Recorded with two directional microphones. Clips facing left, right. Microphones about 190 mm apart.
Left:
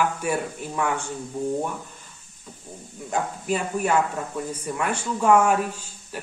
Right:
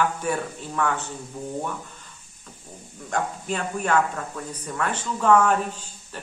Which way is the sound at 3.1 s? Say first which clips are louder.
Left 2 dB; 5° left (ahead or behind).